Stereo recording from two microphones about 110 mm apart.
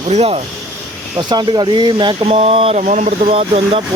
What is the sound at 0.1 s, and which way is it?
Speech, 75° right (ahead or behind).